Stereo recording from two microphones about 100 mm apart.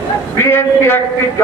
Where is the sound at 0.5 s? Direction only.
25° left (ahead or behind).